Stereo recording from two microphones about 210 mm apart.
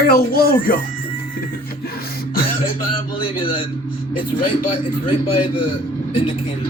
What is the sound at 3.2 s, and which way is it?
Speech, 25° left (ahead or behind).